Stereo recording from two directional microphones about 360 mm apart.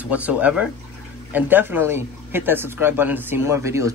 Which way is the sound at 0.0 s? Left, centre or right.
Centre.